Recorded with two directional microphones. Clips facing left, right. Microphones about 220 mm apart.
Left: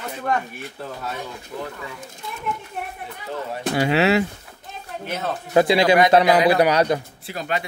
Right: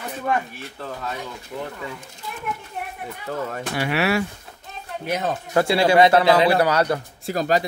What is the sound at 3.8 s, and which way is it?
Speech, 25° left (ahead or behind).